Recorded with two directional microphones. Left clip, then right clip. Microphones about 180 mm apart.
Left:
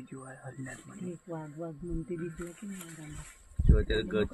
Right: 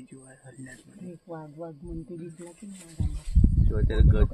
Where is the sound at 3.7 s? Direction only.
55° right (ahead or behind).